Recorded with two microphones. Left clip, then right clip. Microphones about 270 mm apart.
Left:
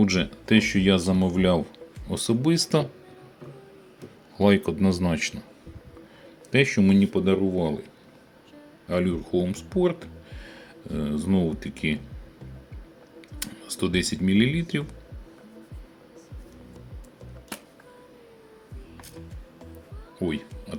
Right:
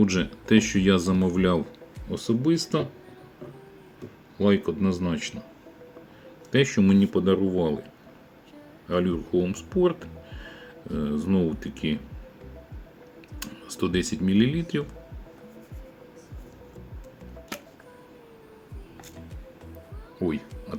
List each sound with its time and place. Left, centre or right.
0.0 s speech: centre
2.0 s speech: left
4.4 s speech: left
6.5 s speech: centre
9.6 s speech: centre
13.4 s speech: centre
20.1 s music: centre